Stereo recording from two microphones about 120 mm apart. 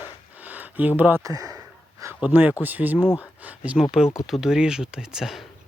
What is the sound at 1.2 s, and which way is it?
Speech, 30° right (ahead or behind).